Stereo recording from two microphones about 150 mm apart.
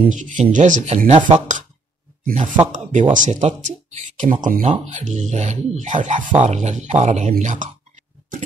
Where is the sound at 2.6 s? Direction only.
55° right (ahead or behind).